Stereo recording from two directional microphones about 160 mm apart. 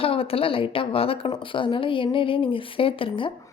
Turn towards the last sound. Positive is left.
turn(degrees=35)  # may be behind; listen again after turning